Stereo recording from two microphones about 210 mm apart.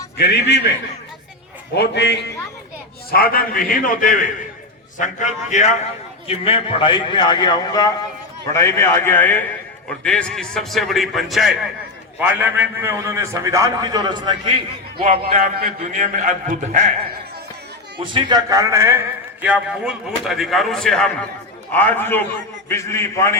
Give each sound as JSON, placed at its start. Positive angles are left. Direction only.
{"t": 0.2, "sound": "a man's voice", "side_deg": 50}
{"t": 1.7, "sound": "a man's voice", "side_deg": 55}
{"t": 15.6, "sound": "a man's voice", "side_deg": -35}
{"t": 18.0, "sound": "a man's voice", "side_deg": -25}